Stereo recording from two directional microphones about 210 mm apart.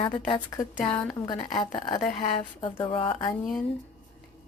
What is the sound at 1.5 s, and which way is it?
Speech, 20° left (ahead or behind).